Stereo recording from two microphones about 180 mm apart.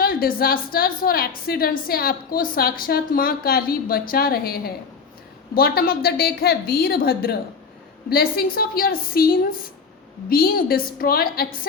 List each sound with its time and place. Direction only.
0.0 s a woman's voice: 55° left (ahead or behind)